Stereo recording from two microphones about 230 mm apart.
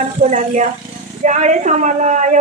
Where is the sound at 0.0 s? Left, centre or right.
Right.